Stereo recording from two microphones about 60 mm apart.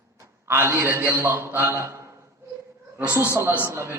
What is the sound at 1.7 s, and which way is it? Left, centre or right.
Speech, right.